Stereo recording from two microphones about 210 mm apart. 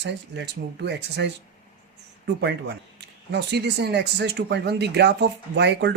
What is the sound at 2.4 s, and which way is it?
Speech, 55° right (ahead or behind).